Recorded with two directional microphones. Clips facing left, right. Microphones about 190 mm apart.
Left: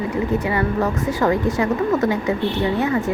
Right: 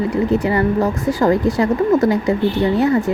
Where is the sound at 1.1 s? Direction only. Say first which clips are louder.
Right 5 dB; 35° right (ahead or behind).